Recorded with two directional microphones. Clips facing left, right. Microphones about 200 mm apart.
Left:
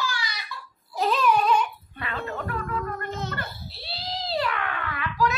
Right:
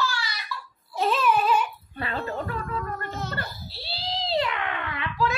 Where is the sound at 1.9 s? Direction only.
35° right (ahead or behind).